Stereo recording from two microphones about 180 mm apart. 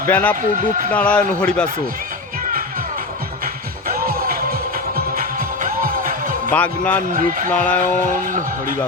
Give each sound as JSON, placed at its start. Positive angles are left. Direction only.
{"t": 0.0, "sound": "a man's voice", "side_deg": 10}
{"t": 3.4, "sound": "music", "side_deg": -55}
{"t": 6.5, "sound": "a man's voice", "side_deg": 10}
{"t": 7.1, "sound": "speech", "side_deg": -50}
{"t": 7.5, "sound": "a man's voice", "side_deg": 10}
{"t": 8.1, "sound": "speech", "side_deg": -50}